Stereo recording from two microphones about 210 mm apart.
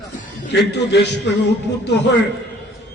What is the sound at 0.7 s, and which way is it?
A man's voice, 55° left (ahead or behind).